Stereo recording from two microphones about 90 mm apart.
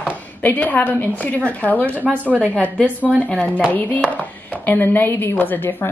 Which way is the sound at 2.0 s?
15° right (ahead or behind).